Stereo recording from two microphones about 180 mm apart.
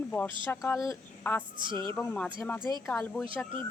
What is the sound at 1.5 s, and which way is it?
Speech, 25° right (ahead or behind).